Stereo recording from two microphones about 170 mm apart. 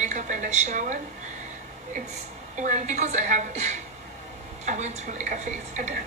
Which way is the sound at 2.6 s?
45° right (ahead or behind).